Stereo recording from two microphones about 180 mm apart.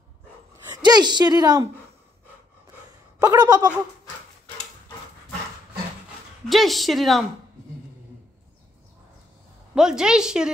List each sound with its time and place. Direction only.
0.7 s a woman's voice: 20° right (ahead or behind)
3.2 s speech: 20° right (ahead or behind)
6.5 s speech: centre (ahead or behind)
9.8 s speech: 5° right (ahead or behind)